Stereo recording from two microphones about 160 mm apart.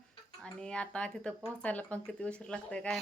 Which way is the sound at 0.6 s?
5° left (ahead or behind).